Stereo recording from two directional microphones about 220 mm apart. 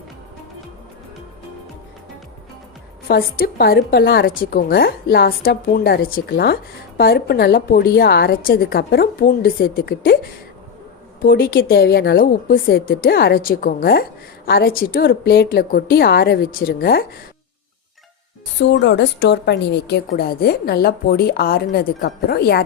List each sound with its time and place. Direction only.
3.1 s a woman's voice: 45° left (ahead or behind)
11.2 s a woman's voice: 40° left (ahead or behind)
18.6 s a woman's voice: 55° left (ahead or behind)